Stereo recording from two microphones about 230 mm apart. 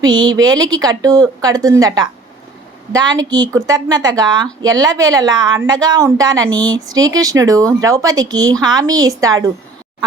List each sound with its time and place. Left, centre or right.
0.0 s a woman's voice: centre